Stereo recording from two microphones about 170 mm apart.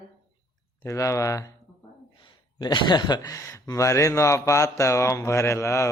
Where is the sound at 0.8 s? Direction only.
20° left (ahead or behind).